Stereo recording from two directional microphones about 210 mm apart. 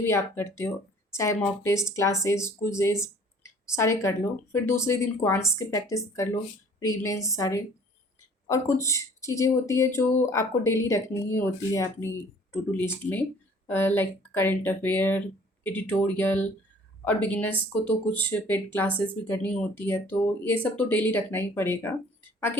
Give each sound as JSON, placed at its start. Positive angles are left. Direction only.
{"t": 0.0, "sound": "a woman's voice", "side_deg": 10}